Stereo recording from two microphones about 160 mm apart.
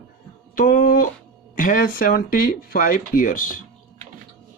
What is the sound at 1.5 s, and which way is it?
Speech, 55° left (ahead or behind).